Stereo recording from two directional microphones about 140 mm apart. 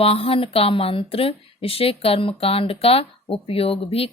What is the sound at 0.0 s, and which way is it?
Speech, 45° left (ahead or behind).